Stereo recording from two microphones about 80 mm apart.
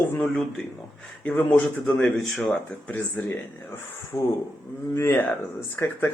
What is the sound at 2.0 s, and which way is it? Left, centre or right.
Speech, centre.